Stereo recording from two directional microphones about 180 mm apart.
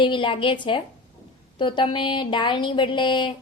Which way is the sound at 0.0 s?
25° left (ahead or behind).